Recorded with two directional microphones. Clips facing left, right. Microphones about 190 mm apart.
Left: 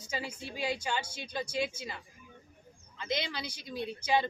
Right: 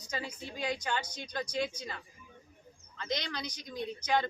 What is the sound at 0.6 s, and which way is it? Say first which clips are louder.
Speech: left 1 dB; 25° left (ahead or behind).